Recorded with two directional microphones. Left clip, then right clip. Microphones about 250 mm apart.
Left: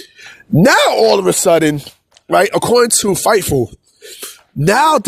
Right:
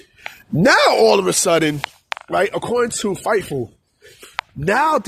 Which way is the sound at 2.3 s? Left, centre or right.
Left.